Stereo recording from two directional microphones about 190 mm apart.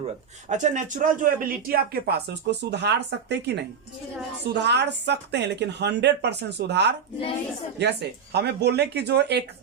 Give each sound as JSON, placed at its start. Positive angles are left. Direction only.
{"t": 0.4, "sound": "speech", "side_deg": -40}